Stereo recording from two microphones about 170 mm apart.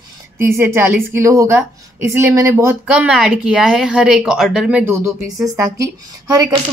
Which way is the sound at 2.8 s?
5° right (ahead or behind).